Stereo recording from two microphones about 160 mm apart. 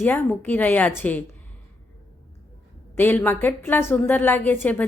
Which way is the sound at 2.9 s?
10° left (ahead or behind).